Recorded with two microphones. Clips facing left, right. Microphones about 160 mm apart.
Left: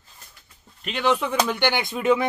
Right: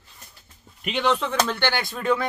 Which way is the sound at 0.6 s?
Centre (ahead or behind).